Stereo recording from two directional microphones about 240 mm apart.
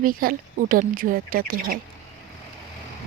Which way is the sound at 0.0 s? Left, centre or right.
Right.